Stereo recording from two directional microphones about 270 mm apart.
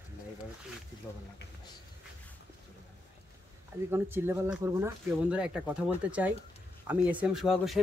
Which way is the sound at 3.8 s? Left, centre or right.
Centre.